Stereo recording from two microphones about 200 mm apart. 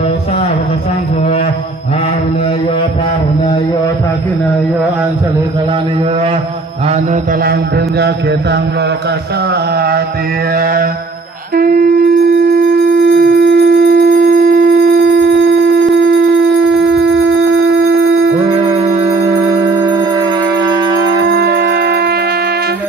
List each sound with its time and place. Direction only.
6.8 s mantra: 35° right (ahead or behind)
7.4 s mantra: 50° right (ahead or behind)
9.5 s a sound: 50° right (ahead or behind)
10.5 s mantra: 45° right (ahead or behind)
11.5 s wind instrument: 45° right (ahead or behind)
18.3 s music: 25° right (ahead or behind)
21.2 s shofar: 55° right (ahead or behind)